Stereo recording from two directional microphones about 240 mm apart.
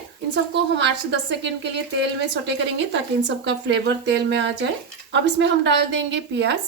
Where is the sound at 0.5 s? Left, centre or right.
Right.